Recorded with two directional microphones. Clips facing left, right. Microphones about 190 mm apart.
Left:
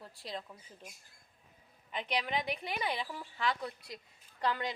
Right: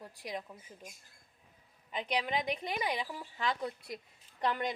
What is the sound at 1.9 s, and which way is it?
A woman's voice, 15° right (ahead or behind).